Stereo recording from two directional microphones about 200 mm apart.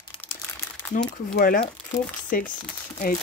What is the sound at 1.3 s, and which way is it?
Speech, 50° left (ahead or behind).